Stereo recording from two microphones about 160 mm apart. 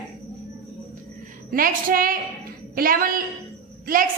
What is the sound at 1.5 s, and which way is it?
A woman's voice, 60° right (ahead or behind).